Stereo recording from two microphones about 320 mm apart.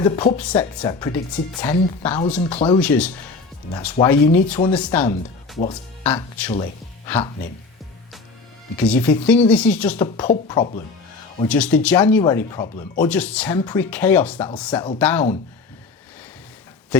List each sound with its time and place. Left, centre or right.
0.0 s speech: centre
5.5 s speech: centre
6.1 s speech: centre
8.8 s speech: centre
10.5 s speech: centre
11.4 s speech: centre
13.0 s speech: centre
16.9 s a sound: centre